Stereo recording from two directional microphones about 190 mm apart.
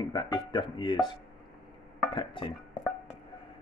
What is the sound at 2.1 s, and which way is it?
Speech, 25° left (ahead or behind).